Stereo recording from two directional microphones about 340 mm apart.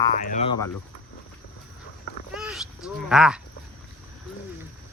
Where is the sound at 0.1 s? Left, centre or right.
Left.